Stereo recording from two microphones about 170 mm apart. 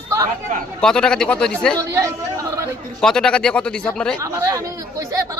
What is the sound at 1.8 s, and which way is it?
Speech, 20° right (ahead or behind).